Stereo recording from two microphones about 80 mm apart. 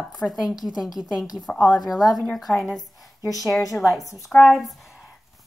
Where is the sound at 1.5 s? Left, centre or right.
Centre.